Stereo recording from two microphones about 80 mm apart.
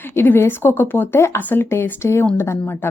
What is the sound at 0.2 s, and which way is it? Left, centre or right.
A woman's voice, left.